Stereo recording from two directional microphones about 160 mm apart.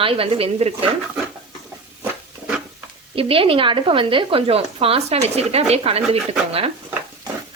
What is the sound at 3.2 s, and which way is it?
Speech, 35° right (ahead or behind).